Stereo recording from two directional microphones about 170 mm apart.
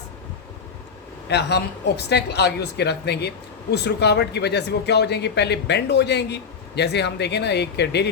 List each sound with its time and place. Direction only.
1.3 s a woman's voice: 80° left